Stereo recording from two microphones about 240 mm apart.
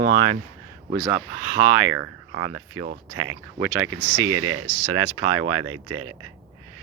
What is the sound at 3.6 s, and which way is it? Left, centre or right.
Speech, centre.